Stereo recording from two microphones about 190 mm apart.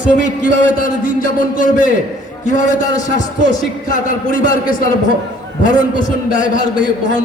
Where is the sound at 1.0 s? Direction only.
45° left (ahead or behind).